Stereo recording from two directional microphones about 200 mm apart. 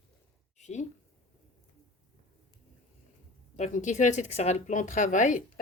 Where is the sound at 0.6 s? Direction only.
35° left (ahead or behind).